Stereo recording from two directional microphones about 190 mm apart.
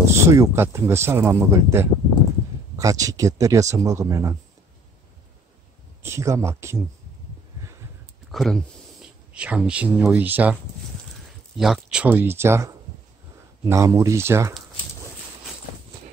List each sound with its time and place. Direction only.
0.0 s speech: 15° right (ahead or behind)
6.0 s speech: 15° right (ahead or behind)
8.3 s speech: centre (ahead or behind)